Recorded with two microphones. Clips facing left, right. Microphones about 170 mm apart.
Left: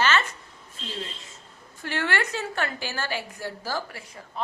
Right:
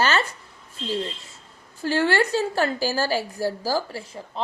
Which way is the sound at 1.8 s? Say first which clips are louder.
Right 7 dB; 35° right (ahead or behind).